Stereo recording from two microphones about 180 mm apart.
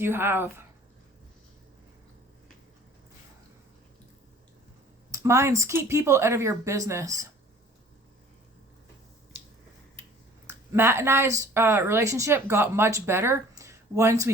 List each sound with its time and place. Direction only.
0.0 s speech: 10° right (ahead or behind)
5.1 s speech: 15° right (ahead or behind)
10.4 s speech: 15° right (ahead or behind)